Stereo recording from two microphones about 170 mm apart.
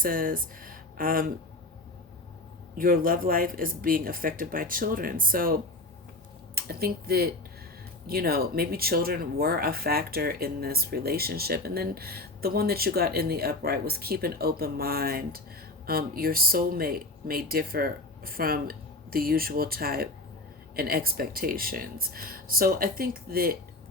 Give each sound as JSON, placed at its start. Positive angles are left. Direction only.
{"t": 0.0, "sound": "speech", "side_deg": -55}
{"t": 2.7, "sound": "speech", "side_deg": -55}